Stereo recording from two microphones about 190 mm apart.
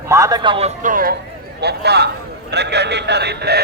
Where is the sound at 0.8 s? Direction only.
45° right (ahead or behind).